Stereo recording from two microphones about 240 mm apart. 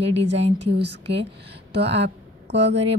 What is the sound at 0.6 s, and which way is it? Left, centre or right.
Speech, right.